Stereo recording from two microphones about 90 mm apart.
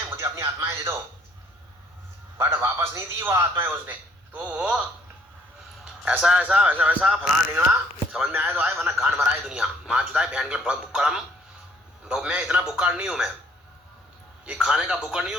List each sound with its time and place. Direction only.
0.2 s speech: 30° right (ahead or behind)
2.4 s a man's voice: 25° right (ahead or behind)
3.5 s a man's voice: 20° right (ahead or behind)
5.8 s a man's voice: 10° right (ahead or behind)
14.4 s speech: 10° right (ahead or behind)